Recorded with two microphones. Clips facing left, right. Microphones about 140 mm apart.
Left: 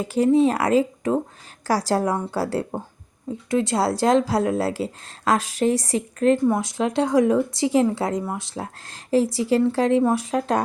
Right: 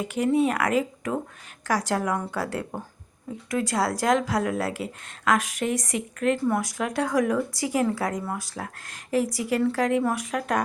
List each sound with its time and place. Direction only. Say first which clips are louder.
0.1 s a woman's voice: left 6 dB; 30° left (ahead or behind)